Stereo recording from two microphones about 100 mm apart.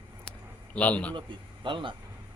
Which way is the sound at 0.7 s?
10° left (ahead or behind).